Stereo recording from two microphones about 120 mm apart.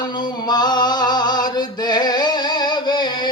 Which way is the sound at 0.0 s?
35° left (ahead or behind).